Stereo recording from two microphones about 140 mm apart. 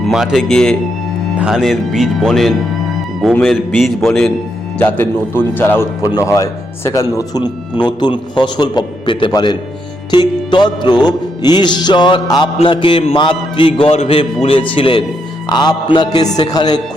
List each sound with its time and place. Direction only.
0.0 s speech: 5° right (ahead or behind)
4.8 s a man's voice: 15° left (ahead or behind); by 16.8 s 30° left (ahead or behind)